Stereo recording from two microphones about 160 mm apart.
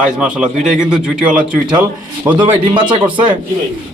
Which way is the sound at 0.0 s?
5° right (ahead or behind).